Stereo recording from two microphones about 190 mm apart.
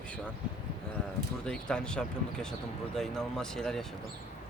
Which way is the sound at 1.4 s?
5° left (ahead or behind).